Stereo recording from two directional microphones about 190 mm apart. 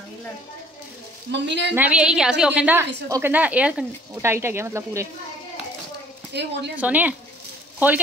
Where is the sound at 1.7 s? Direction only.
5° right (ahead or behind).